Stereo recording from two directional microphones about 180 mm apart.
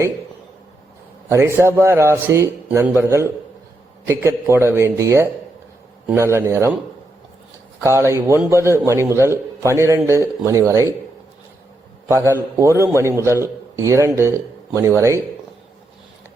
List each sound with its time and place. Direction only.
1.3 s a man's voice: 15° right (ahead or behind)
7.9 s a man's voice: 15° right (ahead or behind)
12.0 s a man's voice: 15° right (ahead or behind)